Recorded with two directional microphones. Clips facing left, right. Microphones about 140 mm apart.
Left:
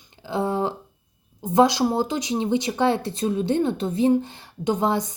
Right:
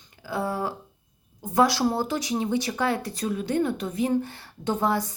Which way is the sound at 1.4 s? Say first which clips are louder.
Left 3 dB; 20° left (ahead or behind).